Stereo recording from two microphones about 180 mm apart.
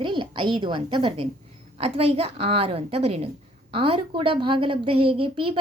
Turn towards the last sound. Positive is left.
turn(degrees=-30)  # may be behind; listen again after turning